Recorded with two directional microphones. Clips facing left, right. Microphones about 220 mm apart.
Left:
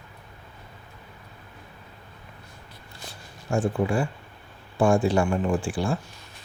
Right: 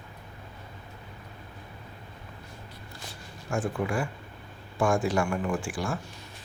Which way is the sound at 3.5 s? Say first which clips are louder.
Left 5 dB; 30° left (ahead or behind).